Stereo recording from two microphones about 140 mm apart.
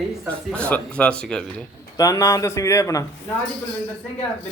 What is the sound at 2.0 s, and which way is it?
Speech, 20° left (ahead or behind).